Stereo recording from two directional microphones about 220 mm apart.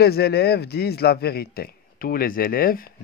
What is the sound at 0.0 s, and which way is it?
A man's voice, 45° left (ahead or behind).